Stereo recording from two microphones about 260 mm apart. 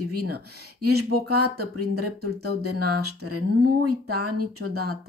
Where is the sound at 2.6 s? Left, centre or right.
Right.